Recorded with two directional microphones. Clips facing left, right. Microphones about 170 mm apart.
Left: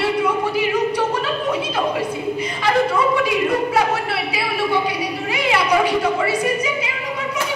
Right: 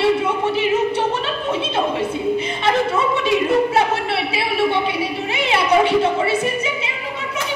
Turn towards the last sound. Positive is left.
turn(degrees=-25)  # may be behind; listen again after turning